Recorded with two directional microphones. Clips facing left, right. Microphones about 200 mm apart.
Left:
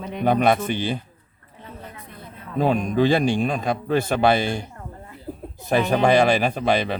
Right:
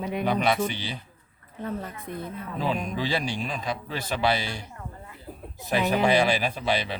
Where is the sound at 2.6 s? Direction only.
50° left (ahead or behind).